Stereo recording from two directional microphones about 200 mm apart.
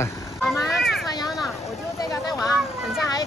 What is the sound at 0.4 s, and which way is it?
Vehicle, centre (ahead or behind).